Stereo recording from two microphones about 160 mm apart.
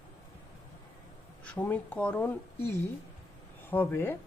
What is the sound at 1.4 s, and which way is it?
Speech, 10° left (ahead or behind).